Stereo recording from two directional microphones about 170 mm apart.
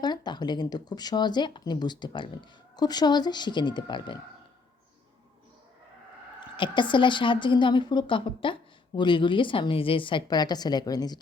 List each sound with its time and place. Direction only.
0.0 s speech: 25° left (ahead or behind)
6.6 s speech: 30° left (ahead or behind)